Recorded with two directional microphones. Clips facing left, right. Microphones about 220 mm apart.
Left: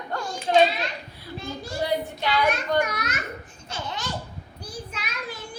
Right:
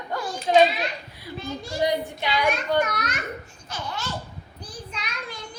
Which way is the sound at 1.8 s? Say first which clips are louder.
Right 1 dB; 15° right (ahead or behind).